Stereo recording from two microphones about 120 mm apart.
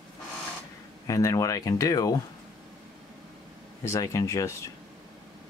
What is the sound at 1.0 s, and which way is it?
Speech, 30° left (ahead or behind).